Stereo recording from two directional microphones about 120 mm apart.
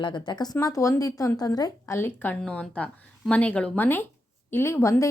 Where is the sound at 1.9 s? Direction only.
20° left (ahead or behind).